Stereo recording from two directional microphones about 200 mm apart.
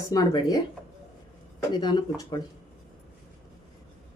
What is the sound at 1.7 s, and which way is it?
Speech, 20° left (ahead or behind).